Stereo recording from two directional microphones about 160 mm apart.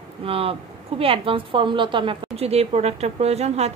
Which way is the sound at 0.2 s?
35° right (ahead or behind).